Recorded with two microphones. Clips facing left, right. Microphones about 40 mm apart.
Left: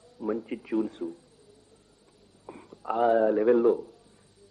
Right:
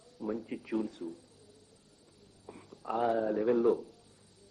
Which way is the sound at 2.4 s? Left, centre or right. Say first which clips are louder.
Left 5 dB; left.